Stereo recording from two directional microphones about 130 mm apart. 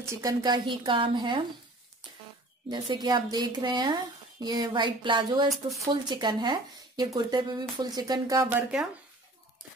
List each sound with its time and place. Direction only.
0.0 s a woman's voice: 25° right (ahead or behind)
2.7 s a woman's voice: 35° right (ahead or behind)